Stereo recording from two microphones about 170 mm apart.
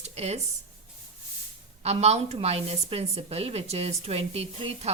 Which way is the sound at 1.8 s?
40° right (ahead or behind).